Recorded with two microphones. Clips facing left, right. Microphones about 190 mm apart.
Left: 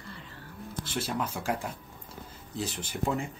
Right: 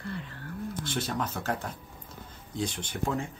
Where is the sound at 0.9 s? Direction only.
5° left (ahead or behind).